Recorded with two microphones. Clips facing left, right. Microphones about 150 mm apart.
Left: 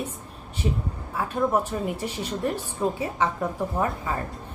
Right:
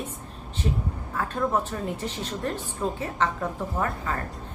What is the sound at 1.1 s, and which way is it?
Speech, 10° left (ahead or behind).